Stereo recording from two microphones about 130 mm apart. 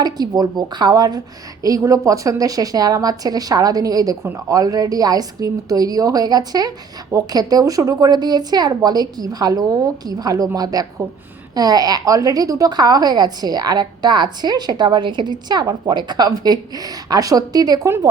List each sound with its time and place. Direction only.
0.0 s a woman's voice: 30° right (ahead or behind)